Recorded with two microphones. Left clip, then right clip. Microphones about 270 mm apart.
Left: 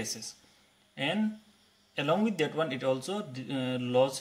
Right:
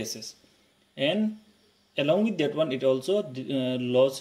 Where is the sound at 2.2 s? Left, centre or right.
Left.